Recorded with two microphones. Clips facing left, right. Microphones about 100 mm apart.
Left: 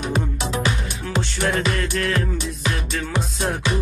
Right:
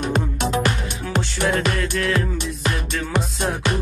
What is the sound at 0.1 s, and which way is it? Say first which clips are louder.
Music: right 2 dB; 50° right (ahead or behind).